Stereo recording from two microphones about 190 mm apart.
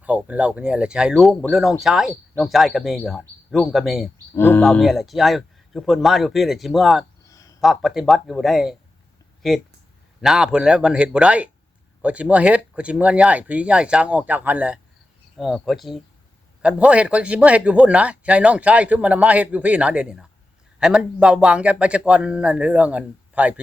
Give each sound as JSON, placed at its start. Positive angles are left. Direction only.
{"t": 0.0, "sound": "speech", "side_deg": -5}
{"t": 4.4, "sound": "speech", "side_deg": 10}
{"t": 7.3, "sound": "a sound", "side_deg": 15}
{"t": 7.6, "sound": "speech", "side_deg": 0}
{"t": 10.2, "sound": "a man's voice", "side_deg": -5}